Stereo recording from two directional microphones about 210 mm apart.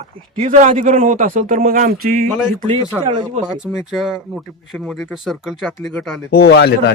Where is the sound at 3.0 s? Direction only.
20° right (ahead or behind).